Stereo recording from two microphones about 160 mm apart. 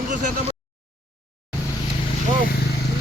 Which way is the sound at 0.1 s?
55° right (ahead or behind).